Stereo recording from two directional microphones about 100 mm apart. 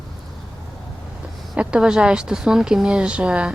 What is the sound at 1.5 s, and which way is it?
Speech, 10° right (ahead or behind).